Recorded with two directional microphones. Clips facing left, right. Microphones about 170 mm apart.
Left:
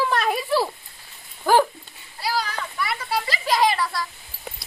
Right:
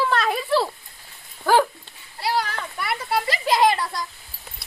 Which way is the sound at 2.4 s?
55° right (ahead or behind).